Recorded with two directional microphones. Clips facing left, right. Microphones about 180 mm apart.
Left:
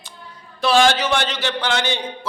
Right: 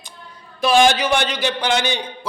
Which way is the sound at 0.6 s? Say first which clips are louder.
Right 1 dB; 15° right (ahead or behind).